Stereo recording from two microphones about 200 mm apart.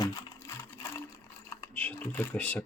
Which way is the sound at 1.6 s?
5° left (ahead or behind).